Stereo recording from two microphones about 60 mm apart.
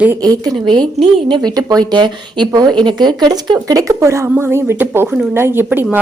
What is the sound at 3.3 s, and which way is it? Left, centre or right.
Speech, right.